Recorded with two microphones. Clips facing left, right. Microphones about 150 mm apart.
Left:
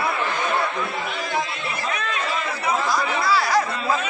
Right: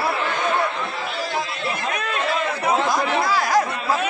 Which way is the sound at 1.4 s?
Centre (ahead or behind).